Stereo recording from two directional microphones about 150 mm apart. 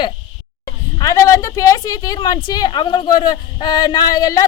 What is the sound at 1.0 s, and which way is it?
Speech, 20° left (ahead or behind).